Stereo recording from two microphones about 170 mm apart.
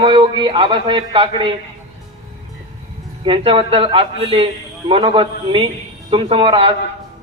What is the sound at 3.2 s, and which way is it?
A man's voice, 30° right (ahead or behind).